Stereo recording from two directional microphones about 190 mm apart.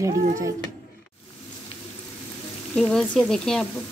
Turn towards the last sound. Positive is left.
turn(degrees=5)  # may be behind; listen again after turning